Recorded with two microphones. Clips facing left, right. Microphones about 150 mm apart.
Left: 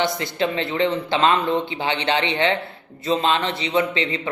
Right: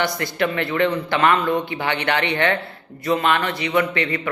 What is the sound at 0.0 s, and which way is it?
A man's voice, 20° left (ahead or behind).